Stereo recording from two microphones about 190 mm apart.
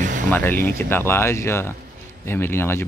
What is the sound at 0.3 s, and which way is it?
Speech, 10° left (ahead or behind).